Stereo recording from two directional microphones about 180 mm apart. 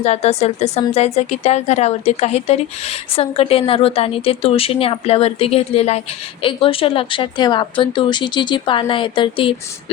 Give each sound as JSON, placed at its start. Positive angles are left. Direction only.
{"t": 0.0, "sound": "a woman's voice", "side_deg": 35}